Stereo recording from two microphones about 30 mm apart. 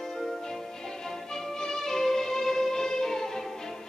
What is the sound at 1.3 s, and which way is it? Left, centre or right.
Music, centre.